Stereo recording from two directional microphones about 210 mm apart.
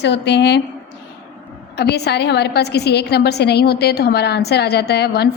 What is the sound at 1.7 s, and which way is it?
A woman's voice, 50° left (ahead or behind).